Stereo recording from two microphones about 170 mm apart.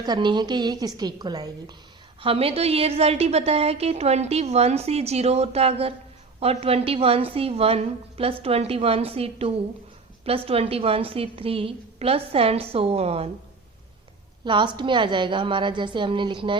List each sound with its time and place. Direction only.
0.0 s a woman's voice: 25° right (ahead or behind)
14.4 s a woman's voice: 30° right (ahead or behind)